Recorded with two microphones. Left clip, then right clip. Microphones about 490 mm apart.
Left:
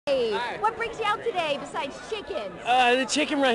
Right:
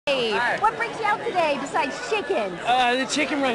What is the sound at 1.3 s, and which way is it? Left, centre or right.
Speech, centre.